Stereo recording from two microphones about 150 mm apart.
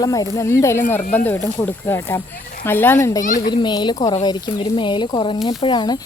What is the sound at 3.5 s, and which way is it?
Speech, 30° left (ahead or behind).